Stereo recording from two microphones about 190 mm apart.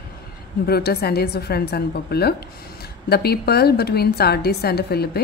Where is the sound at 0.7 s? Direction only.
55° left (ahead or behind).